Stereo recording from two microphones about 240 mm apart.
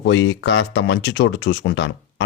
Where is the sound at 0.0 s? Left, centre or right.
Left.